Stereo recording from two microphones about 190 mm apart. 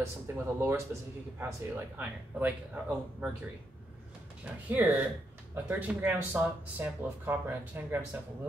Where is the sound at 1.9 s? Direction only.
10° right (ahead or behind).